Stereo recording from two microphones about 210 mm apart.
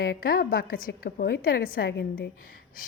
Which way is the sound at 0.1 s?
45° left (ahead or behind).